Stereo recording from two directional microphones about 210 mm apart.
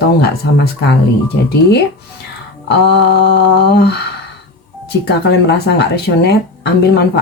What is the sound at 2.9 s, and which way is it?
Speech, 55° left (ahead or behind).